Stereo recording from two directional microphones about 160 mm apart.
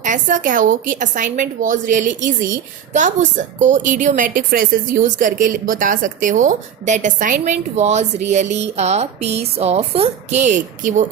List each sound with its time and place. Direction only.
0.0 s a woman's voice: 50° right (ahead or behind)